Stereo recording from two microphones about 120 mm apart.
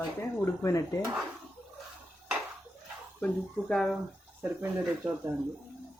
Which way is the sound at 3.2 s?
Centre (ahead or behind).